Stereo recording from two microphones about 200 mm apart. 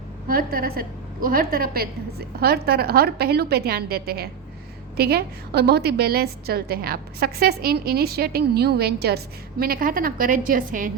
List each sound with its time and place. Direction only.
0.3 s a woman's voice: 45° right (ahead or behind)